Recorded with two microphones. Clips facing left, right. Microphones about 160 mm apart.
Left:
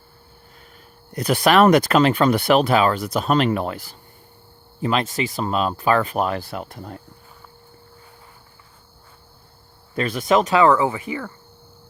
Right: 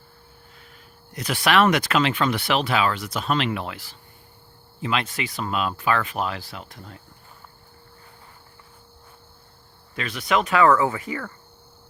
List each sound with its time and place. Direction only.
1.2 s speech: 40° left (ahead or behind)
9.9 s speech: 40° left (ahead or behind)
10.5 s speech: 25° left (ahead or behind)